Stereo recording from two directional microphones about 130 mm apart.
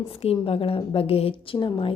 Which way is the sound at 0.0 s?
45° left (ahead or behind).